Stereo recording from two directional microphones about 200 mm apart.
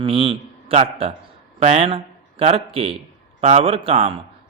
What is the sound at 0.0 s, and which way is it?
A man's voice, 30° right (ahead or behind).